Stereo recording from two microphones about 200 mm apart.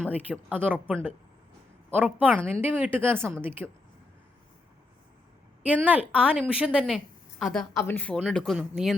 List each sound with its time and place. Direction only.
0.0 s speech: 10° right (ahead or behind)
5.6 s a woman's voice: 5° right (ahead or behind)